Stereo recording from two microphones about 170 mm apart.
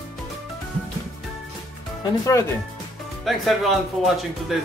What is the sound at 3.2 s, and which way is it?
Speech, centre (ahead or behind).